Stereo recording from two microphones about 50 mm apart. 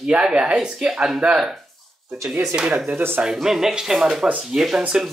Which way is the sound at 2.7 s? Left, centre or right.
Right.